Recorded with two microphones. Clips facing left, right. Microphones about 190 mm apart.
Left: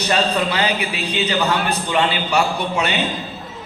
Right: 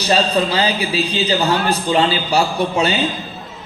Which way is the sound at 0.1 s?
30° right (ahead or behind).